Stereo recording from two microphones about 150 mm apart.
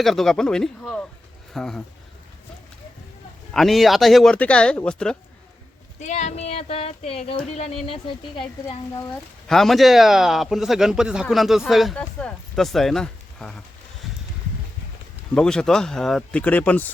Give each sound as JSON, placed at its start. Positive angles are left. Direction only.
{"t": 0.0, "sound": "speech", "side_deg": 0}
{"t": 3.5, "sound": "speech", "side_deg": 0}
{"t": 6.0, "sound": "speech", "side_deg": 50}
{"t": 9.5, "sound": "speech", "side_deg": 0}
{"t": 15.4, "sound": "speech", "side_deg": 5}